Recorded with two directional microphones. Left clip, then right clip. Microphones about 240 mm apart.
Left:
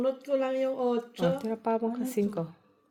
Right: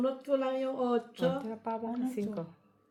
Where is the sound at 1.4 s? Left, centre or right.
Left.